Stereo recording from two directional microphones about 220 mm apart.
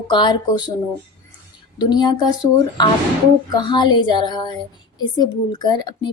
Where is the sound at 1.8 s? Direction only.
20° left (ahead or behind).